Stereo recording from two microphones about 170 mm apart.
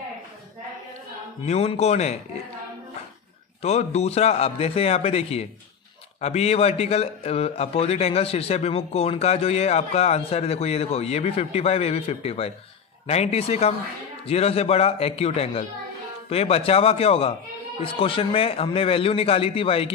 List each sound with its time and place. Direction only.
1.4 s a man's voice: 40° left (ahead or behind)
3.6 s a man's voice: 40° left (ahead or behind)